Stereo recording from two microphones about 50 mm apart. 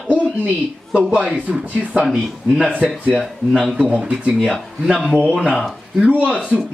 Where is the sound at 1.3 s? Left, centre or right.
Right.